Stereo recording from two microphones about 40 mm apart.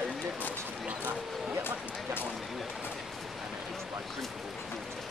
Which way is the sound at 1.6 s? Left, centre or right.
Left.